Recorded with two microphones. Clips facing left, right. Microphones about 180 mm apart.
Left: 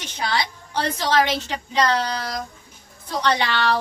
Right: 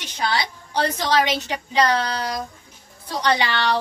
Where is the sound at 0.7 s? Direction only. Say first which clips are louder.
Right 1 dB; 15° right (ahead or behind).